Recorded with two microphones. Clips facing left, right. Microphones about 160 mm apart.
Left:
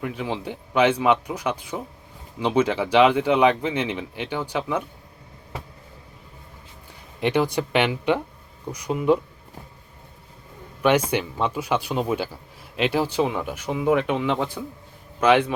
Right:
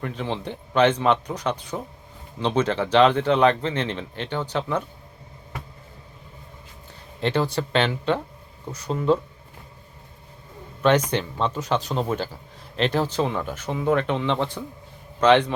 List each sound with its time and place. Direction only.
0.0 s speech: 5° left (ahead or behind)
7.2 s speech: 15° left (ahead or behind)
11.1 s speech: 10° left (ahead or behind)